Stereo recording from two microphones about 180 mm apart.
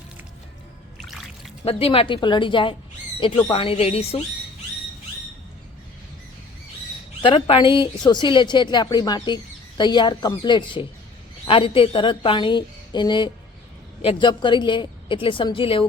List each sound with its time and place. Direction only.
1.6 s a woman's voice: 30° left (ahead or behind)
7.2 s a woman's voice: 30° left (ahead or behind)